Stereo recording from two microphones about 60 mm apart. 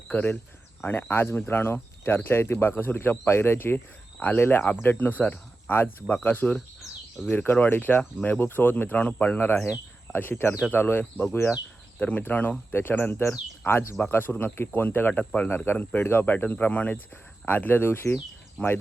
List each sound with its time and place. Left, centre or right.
0.1 s speech: left
1.1 s speech: left
9.4 s speech: left
13.2 s speech: left
14.0 s speech: left
15.2 s speech: centre
15.4 s speech: left